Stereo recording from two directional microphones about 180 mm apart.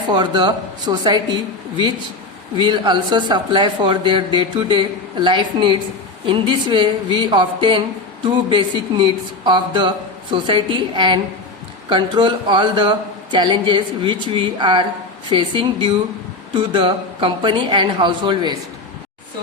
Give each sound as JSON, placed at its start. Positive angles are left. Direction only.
{"t": 0.1, "sound": "speech", "side_deg": -25}
{"t": 2.6, "sound": "speech", "side_deg": -25}